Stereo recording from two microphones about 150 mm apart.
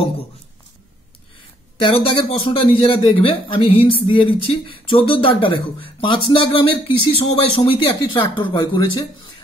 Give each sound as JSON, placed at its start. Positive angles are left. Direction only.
{"t": 1.8, "sound": "speech", "side_deg": 35}